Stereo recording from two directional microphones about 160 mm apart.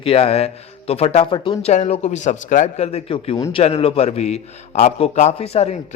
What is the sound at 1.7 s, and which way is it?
A man's voice, 45° left (ahead or behind).